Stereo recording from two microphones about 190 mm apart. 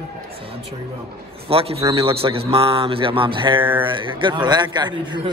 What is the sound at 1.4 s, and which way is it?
A man's voice, 30° right (ahead or behind).